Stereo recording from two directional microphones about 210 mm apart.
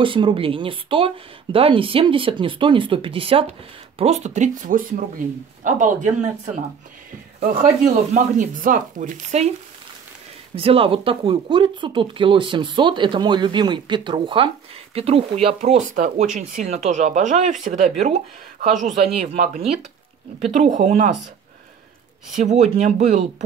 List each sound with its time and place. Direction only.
0.0 s speech: 25° right (ahead or behind)
10.5 s speech: 25° right (ahead or behind)
18.8 s a man's voice: centre (ahead or behind)
19.3 s speech: 35° right (ahead or behind)
22.3 s speech: 35° right (ahead or behind)